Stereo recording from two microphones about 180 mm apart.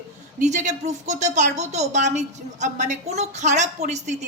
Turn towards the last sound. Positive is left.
turn(degrees=-40)  # may be behind; listen again after turning